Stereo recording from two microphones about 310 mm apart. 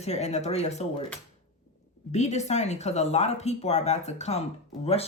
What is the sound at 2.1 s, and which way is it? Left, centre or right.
Speech, left.